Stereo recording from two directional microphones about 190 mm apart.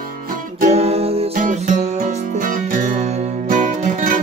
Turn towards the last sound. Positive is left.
turn(degrees=-40)  # may be behind; listen again after turning